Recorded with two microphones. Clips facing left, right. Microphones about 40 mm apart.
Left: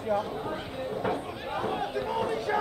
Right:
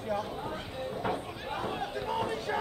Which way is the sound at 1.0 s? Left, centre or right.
Centre.